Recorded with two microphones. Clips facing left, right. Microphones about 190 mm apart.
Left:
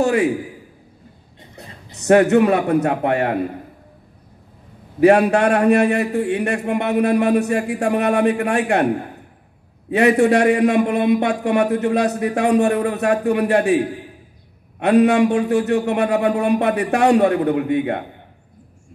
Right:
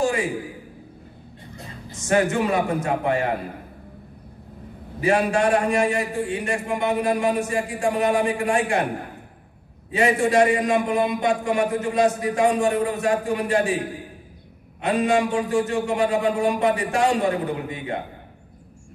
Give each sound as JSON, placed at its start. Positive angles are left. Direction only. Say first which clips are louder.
{"t": 0.0, "sound": "a sound", "louder": "left 6 dB", "side_deg": 65}
{"t": 2.0, "sound": "a man's voice", "louder": "left 8 dB", "side_deg": 65}
{"t": 5.0, "sound": "a man's voice", "louder": "left 7 dB", "side_deg": 65}
{"t": 9.8, "sound": "a man's voice", "louder": "left 6 dB", "side_deg": 65}